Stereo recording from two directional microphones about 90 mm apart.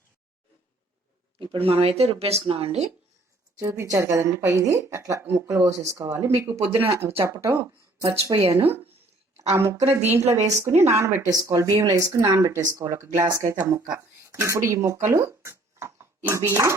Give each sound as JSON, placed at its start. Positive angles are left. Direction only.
{"t": 1.4, "sound": "speech", "side_deg": -90}
{"t": 3.6, "sound": "speech", "side_deg": -35}
{"t": 7.6, "sound": "speech", "side_deg": -50}
{"t": 8.5, "sound": "a woman's voice", "side_deg": -20}
{"t": 11.3, "sound": "speech", "side_deg": -45}
{"t": 14.3, "sound": "speech", "side_deg": -30}